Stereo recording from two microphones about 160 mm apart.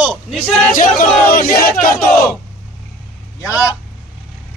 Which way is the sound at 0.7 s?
55° left (ahead or behind).